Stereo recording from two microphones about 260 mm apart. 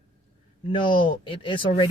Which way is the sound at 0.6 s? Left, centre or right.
Centre.